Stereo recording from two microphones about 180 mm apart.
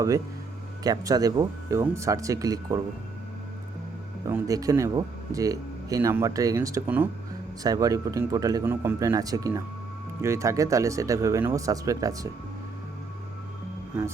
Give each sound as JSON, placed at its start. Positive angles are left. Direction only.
{"t": 0.9, "sound": "speech", "side_deg": -20}
{"t": 4.3, "sound": "speech", "side_deg": -15}